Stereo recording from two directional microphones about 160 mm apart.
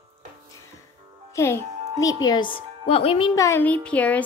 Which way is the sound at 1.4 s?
15° left (ahead or behind).